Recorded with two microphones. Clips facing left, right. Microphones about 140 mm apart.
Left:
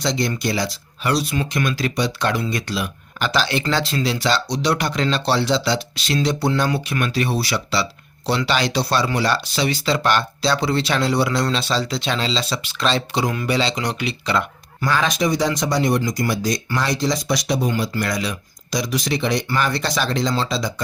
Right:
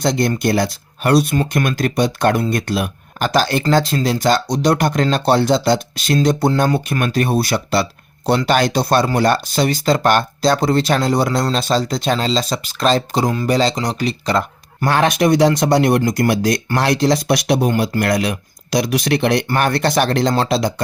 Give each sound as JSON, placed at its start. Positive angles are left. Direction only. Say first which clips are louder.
{"t": 0.0, "sound": "speech", "louder": "right 5 dB", "side_deg": -55}
{"t": 14.8, "sound": "speech", "louder": "right 5 dB", "side_deg": -60}